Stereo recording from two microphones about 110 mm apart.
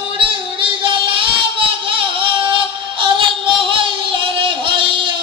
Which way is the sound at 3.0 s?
50° right (ahead or behind).